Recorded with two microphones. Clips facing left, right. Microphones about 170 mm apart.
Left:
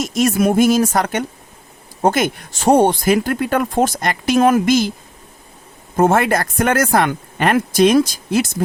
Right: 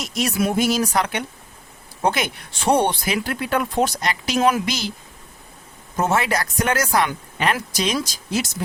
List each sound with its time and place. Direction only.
0.0 s speech: 50° left (ahead or behind)
6.0 s speech: 50° left (ahead or behind)